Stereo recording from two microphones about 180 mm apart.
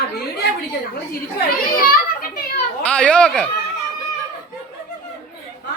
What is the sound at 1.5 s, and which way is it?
Speech, 55° left (ahead or behind).